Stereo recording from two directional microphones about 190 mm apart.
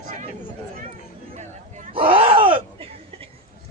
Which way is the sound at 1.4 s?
40° right (ahead or behind).